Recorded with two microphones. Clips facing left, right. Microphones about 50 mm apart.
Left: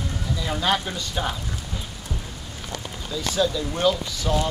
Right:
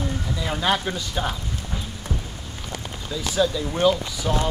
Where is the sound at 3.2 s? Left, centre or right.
Centre.